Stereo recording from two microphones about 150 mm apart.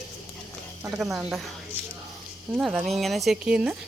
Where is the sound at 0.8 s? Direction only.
Centre (ahead or behind).